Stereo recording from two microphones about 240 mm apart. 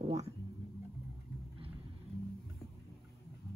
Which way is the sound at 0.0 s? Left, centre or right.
Right.